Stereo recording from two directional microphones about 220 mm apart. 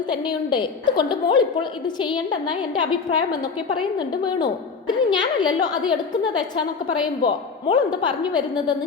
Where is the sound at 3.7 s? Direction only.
20° left (ahead or behind).